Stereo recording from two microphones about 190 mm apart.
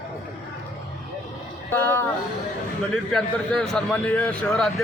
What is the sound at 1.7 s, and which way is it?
Speech, 10° left (ahead or behind).